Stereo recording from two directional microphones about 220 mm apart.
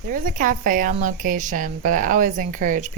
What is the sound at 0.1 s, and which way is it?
A woman's voice, 40° right (ahead or behind).